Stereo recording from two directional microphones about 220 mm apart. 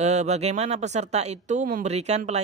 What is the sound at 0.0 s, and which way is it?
Speech, 30° right (ahead or behind).